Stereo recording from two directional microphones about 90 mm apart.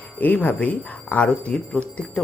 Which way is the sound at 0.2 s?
20° left (ahead or behind).